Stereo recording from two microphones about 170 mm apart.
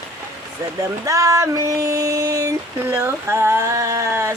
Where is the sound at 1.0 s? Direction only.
20° right (ahead or behind).